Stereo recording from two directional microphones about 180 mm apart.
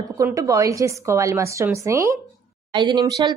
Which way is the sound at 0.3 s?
20° right (ahead or behind).